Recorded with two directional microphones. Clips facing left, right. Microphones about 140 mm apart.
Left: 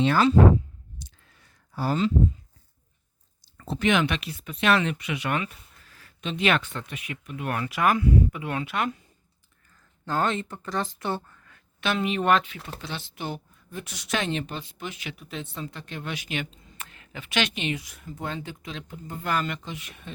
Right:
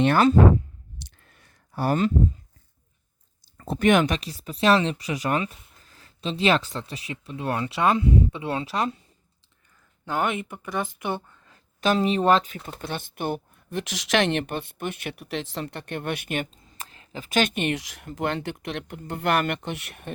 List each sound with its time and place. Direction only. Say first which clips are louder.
0.0 s speech: right 2 dB; 55° right (ahead or behind)
0.9 s clicking: right 1 dB; 55° right (ahead or behind)
3.7 s speech: right 4 dB; 50° right (ahead or behind); by 9.0 s 35° right (ahead or behind)
10.1 s speech: even; 15° right (ahead or behind)
11.4 s speech: right 6 dB; 35° right (ahead or behind)
12.6 s speech: right 3 dB; 50° right (ahead or behind); by 17.2 s 30° right (ahead or behind)
17.2 s speech: right 4 dB; 45° right (ahead or behind)
17.7 s speech: right 6 dB; 85° right; by 20.1 s 60° right (ahead or behind)